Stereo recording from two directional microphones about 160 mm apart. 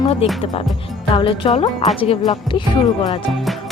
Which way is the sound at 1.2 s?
30° left (ahead or behind).